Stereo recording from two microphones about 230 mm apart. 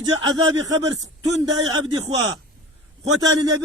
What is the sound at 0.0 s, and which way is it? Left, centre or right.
A man's voice, centre.